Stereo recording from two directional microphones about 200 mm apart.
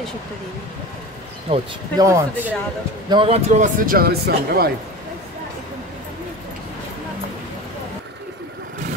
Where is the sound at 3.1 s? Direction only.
25° right (ahead or behind); by 4.6 s 50° right (ahead or behind).